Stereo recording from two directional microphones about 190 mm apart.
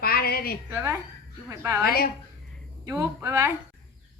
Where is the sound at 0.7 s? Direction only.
15° right (ahead or behind).